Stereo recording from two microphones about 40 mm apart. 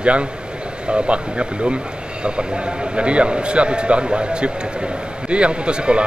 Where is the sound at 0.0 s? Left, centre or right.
Right.